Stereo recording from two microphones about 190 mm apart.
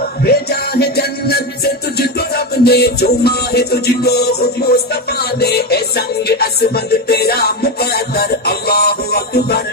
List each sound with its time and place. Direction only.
0.2 s music: 55° left (ahead or behind)